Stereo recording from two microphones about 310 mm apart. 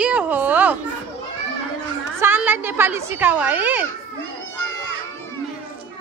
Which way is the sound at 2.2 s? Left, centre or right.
Centre.